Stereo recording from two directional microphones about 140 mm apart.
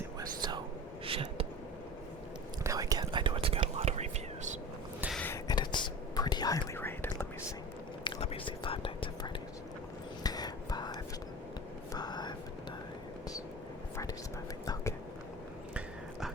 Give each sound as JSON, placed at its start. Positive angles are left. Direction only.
{"t": 0.2, "sound": "whispering", "side_deg": -30}
{"t": 1.0, "sound": "a sound", "side_deg": -40}
{"t": 2.6, "sound": "whispering", "side_deg": -25}
{"t": 5.3, "sound": "whispering", "side_deg": 30}
{"t": 6.7, "sound": "whispering", "side_deg": 15}
{"t": 8.0, "sound": "whispering", "side_deg": 40}
{"t": 10.2, "sound": "whispering", "side_deg": 30}
{"t": 11.9, "sound": "whispering", "side_deg": 30}
{"t": 13.9, "sound": "whispering", "side_deg": 20}